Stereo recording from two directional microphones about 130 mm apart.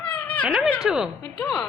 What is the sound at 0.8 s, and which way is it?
Speech, 5° right (ahead or behind).